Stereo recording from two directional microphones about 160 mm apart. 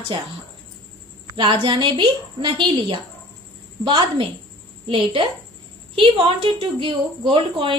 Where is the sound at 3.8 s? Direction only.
30° right (ahead or behind).